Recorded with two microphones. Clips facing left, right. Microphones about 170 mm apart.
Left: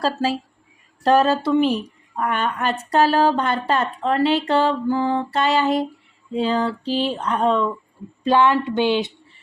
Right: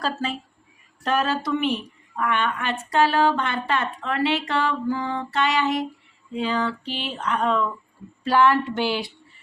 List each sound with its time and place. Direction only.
0.0 s a woman's voice: 35° left (ahead or behind)
8.2 s a woman's voice: 20° left (ahead or behind)